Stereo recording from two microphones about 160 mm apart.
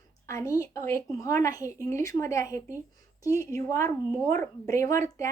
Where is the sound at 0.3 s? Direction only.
20° left (ahead or behind).